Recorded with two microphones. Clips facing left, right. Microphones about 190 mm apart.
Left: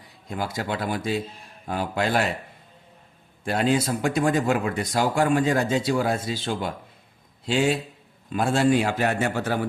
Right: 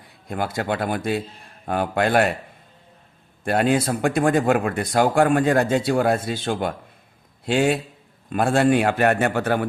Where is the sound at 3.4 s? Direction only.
55° right (ahead or behind).